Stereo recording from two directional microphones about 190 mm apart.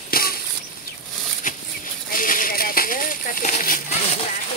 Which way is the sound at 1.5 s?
45° left (ahead or behind).